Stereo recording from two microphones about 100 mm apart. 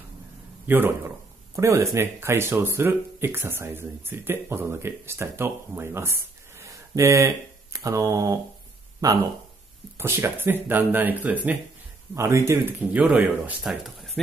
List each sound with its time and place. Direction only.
0.7 s speech: 20° right (ahead or behind); by 9.2 s 35° right (ahead or behind)
9.9 s speech: 25° right (ahead or behind)
12.2 s speech: 30° right (ahead or behind)
12.9 s speech: 15° right (ahead or behind)
13.6 s speech: centre (ahead or behind)